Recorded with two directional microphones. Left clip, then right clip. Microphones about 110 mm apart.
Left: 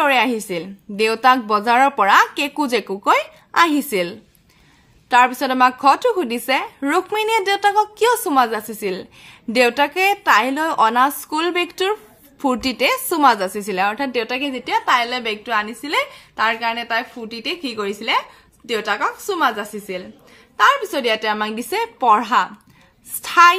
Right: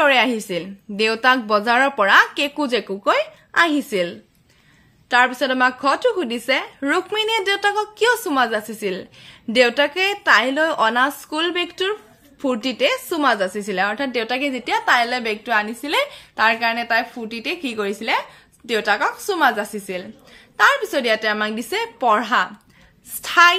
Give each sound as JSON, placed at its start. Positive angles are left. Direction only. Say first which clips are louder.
{"t": 0.0, "sound": "a woman's voice", "louder": "even", "side_deg": 5}
{"t": 15.2, "sound": "a woman's voice", "louder": "right 1 dB", "side_deg": -15}
{"t": 18.7, "sound": "a woman's voice", "louder": "right 1 dB", "side_deg": -10}
{"t": 20.5, "sound": "a woman's voice", "louder": "left 1 dB", "side_deg": 0}